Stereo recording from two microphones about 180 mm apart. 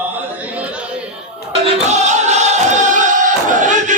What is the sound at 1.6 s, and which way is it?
Music, 40° right (ahead or behind).